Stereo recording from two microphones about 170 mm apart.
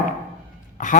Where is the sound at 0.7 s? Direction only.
50° left (ahead or behind).